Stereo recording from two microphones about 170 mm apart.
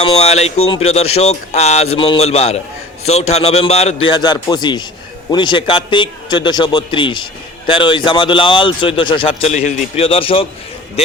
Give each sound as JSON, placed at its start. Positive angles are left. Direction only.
{"t": 0.0, "sound": "speech", "side_deg": 40}
{"t": 4.1, "sound": "a man's voice", "side_deg": 25}